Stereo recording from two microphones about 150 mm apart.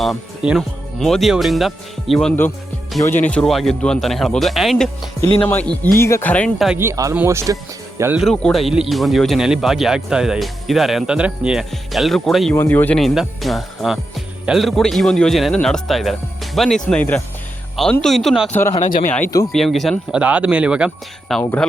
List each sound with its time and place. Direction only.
0.0 s speech: centre (ahead or behind)
3.0 s speech: 15° left (ahead or behind)
5.4 s speech: 10° left (ahead or behind)
6.7 s speech: 20° right (ahead or behind)
8.1 s speech: centre (ahead or behind)
12.5 s speech: 10° left (ahead or behind)
13.0 s speech: centre (ahead or behind)
18.8 s speech: 65° left (ahead or behind)
19.5 s speech: centre (ahead or behind)